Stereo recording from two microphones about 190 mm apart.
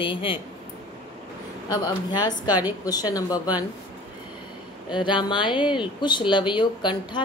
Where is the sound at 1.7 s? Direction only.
20° left (ahead or behind).